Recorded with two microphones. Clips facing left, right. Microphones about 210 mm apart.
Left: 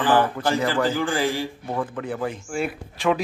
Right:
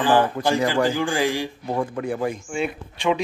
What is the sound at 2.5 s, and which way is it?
Speech, centre (ahead or behind).